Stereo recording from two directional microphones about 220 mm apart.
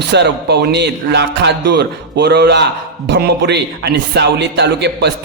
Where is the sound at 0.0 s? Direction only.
50° right (ahead or behind).